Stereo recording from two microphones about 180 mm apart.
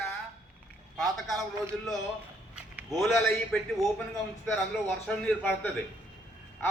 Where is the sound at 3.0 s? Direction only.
Centre (ahead or behind).